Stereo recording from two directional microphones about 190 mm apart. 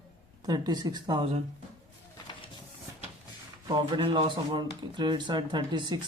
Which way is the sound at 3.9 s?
25° right (ahead or behind).